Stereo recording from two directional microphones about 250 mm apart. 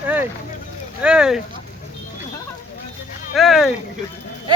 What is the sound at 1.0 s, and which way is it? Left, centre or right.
Speech, centre.